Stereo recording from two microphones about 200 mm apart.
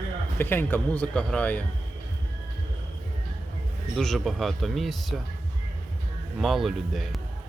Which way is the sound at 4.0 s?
Centre (ahead or behind).